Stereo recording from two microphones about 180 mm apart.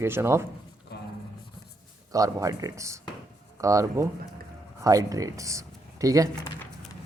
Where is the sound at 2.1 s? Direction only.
20° right (ahead or behind).